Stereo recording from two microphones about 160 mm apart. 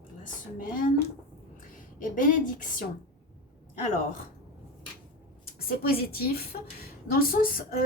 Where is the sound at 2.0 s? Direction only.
55° left (ahead or behind).